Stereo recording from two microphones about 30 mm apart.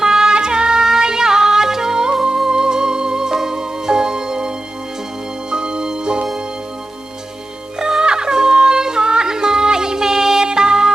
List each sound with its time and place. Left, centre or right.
0.0 s music: centre
7.8 s music: right